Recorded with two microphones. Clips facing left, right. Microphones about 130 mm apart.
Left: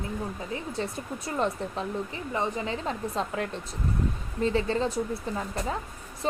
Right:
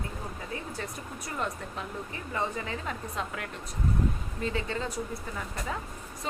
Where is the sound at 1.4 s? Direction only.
25° left (ahead or behind).